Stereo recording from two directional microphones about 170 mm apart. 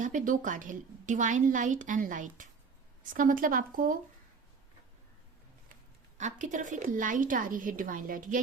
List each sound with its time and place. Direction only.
0.0 s a woman's voice: 50° right (ahead or behind)
6.1 s a woman's voice: 45° right (ahead or behind)